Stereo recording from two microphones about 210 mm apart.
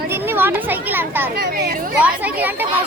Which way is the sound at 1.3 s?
50° right (ahead or behind).